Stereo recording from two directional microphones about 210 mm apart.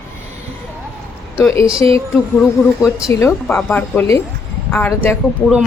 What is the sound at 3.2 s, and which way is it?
Speech, 10° left (ahead or behind).